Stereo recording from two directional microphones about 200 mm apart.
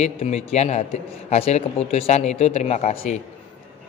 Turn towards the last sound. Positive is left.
turn(degrees=35)  # may be behind; listen again after turning